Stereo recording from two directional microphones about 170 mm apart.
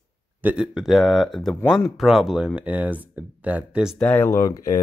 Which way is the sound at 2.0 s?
Centre (ahead or behind).